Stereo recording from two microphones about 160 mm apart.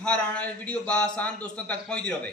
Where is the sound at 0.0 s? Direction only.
5° left (ahead or behind).